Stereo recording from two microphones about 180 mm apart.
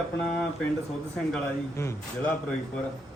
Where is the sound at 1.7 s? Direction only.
15° left (ahead or behind).